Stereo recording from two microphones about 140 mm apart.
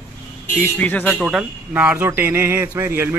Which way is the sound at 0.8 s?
10° left (ahead or behind).